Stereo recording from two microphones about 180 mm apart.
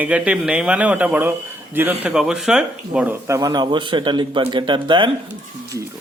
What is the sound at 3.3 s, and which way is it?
A man's voice, 20° right (ahead or behind).